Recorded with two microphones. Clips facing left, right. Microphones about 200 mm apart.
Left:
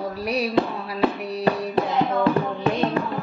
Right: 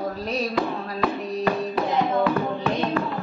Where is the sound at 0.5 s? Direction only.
30° left (ahead or behind).